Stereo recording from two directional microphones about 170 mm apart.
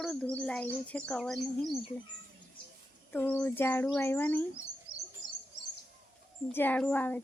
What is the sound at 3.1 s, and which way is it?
Bird, 10° left (ahead or behind).